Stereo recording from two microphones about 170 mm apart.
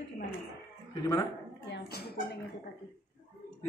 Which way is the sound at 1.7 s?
70° left (ahead or behind).